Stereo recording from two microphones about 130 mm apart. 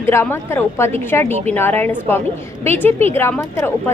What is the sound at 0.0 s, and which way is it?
A woman's voice, 20° left (ahead or behind).